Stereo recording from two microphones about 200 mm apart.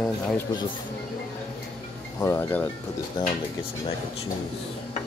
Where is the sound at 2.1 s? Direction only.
10° left (ahead or behind).